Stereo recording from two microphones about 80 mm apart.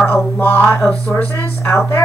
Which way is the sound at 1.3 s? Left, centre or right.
Left.